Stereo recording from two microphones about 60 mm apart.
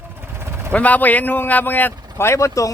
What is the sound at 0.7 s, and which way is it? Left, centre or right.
Speech, left.